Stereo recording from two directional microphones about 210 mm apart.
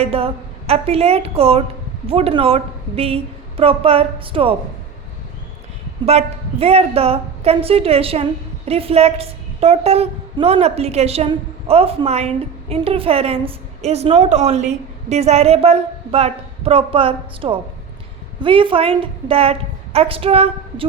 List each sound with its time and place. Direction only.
0.0 s a woman's voice: 25° right (ahead or behind)
6.1 s a woman's voice: 30° right (ahead or behind)